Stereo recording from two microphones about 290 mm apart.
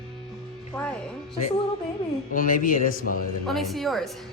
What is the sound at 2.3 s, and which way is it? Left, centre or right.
Speech, left.